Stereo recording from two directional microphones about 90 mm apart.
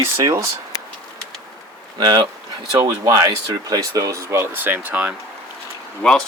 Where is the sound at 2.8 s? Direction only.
40° right (ahead or behind); by 5.1 s 15° right (ahead or behind).